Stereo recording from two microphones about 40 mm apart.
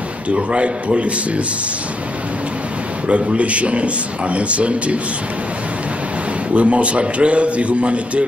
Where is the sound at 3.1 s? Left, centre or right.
Right.